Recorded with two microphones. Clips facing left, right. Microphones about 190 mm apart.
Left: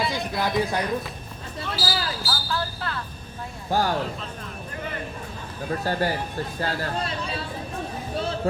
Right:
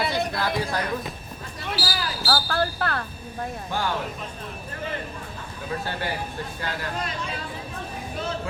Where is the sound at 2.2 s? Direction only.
60° right (ahead or behind).